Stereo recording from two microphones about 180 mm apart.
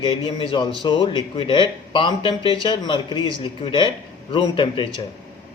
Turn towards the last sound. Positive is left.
turn(degrees=25)  # may be behind; listen again after turning